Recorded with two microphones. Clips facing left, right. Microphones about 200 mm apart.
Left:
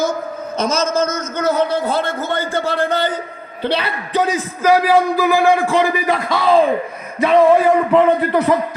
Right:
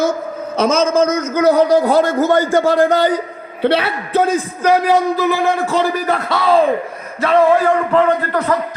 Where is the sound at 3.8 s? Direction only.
Centre (ahead or behind).